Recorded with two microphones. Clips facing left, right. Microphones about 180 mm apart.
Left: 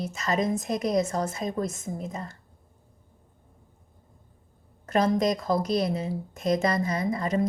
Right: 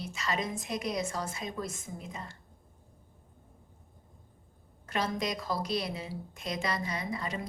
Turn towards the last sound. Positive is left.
turn(degrees=45)  # may be behind; listen again after turning